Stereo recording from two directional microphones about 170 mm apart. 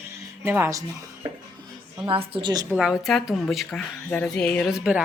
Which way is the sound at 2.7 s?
5° right (ahead or behind).